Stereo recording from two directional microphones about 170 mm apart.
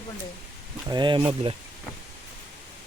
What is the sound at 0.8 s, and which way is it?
Speech, 25° right (ahead or behind).